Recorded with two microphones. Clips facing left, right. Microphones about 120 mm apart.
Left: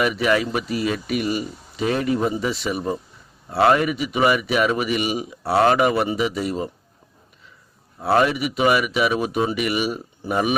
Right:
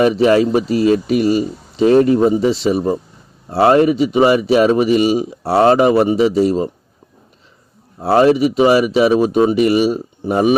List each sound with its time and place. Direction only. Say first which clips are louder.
0.0 s speech: right 8 dB; 30° right (ahead or behind)
8.0 s speech: right 7 dB; 30° right (ahead or behind)